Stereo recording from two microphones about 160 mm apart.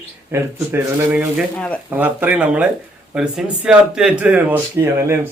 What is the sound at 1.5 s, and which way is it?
Speech, 5° left (ahead or behind).